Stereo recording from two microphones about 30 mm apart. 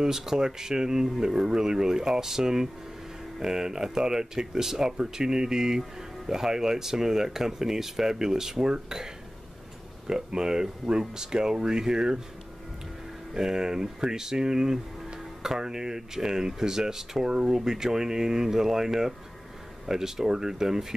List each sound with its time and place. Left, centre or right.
0.0 s speech: centre
13.3 s speech: centre